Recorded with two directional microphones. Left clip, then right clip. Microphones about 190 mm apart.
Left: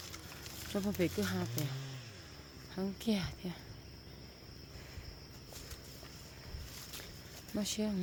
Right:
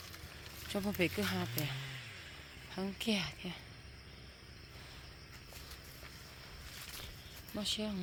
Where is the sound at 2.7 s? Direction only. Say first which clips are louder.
Right 1 dB; 5° left (ahead or behind).